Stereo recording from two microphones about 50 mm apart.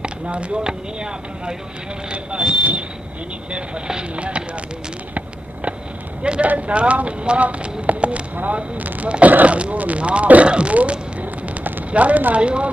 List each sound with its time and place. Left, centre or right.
0.0 s speech: right
6.2 s speech: centre